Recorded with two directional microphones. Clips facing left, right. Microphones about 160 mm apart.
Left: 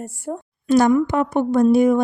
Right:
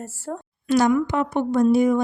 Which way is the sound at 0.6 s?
45° left (ahead or behind).